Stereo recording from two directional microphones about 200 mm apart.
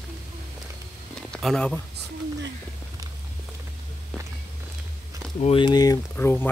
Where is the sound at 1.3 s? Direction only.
5° left (ahead or behind).